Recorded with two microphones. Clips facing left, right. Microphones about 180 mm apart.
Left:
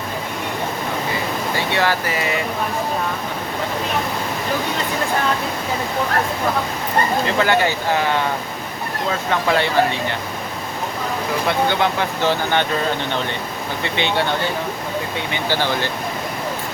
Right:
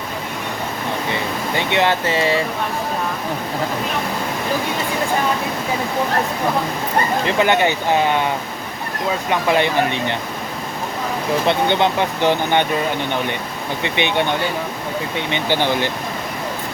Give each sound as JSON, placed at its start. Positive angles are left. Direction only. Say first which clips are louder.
{"t": 1.5, "sound": "speech", "louder": "right 3 dB", "side_deg": -20}
{"t": 7.3, "sound": "speech", "louder": "right 1 dB", "side_deg": -20}
{"t": 9.3, "sound": "speech", "louder": "right 1 dB", "side_deg": -15}
{"t": 11.4, "sound": "speech", "louder": "right 1 dB", "side_deg": -20}
{"t": 13.8, "sound": "speech", "louder": "right 1 dB", "side_deg": -20}